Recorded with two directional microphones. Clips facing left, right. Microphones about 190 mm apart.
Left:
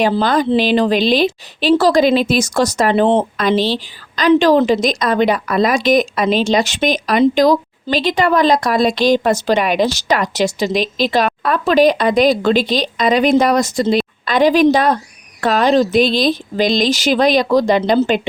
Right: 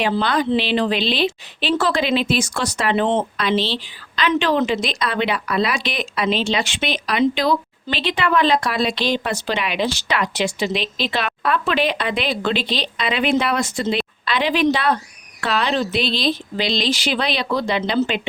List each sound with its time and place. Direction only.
0.0 s speech: 45° left (ahead or behind)